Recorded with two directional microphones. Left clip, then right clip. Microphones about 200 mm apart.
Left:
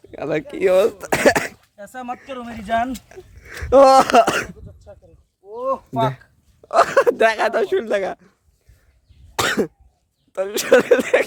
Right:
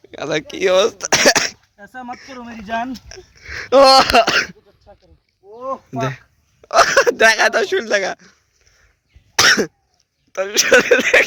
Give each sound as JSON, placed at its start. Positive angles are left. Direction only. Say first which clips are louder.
{"t": 0.1, "sound": "speech", "louder": "right 2 dB", "side_deg": 0}
{"t": 1.7, "sound": "speech", "louder": "left 1 dB", "side_deg": 30}
{"t": 2.4, "sound": "speech", "louder": "left 2 dB", "side_deg": 20}
{"t": 3.4, "sound": "speech", "louder": "right 6 dB", "side_deg": 0}
{"t": 3.8, "sound": "throat clearing", "louder": "right 1 dB", "side_deg": 15}
{"t": 5.9, "sound": "speech", "louder": "left 3 dB", "side_deg": 10}
{"t": 9.3, "sound": "cough", "louder": "right 7 dB", "side_deg": 0}
{"t": 10.3, "sound": "speech", "louder": "right 2 dB", "side_deg": 10}